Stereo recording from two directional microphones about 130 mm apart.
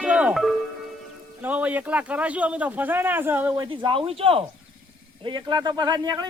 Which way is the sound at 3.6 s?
40° right (ahead or behind).